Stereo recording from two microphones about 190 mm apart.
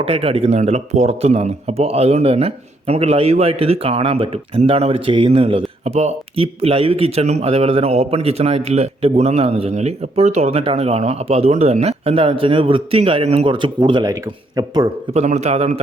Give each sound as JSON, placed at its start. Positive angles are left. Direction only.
{"t": 0.0, "sound": "speech", "side_deg": -30}
{"t": 15.1, "sound": "speech", "side_deg": -35}